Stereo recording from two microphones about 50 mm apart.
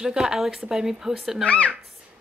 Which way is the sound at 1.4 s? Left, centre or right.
Left.